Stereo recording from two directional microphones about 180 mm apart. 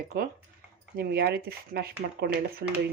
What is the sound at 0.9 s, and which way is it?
Speech, 60° right (ahead or behind).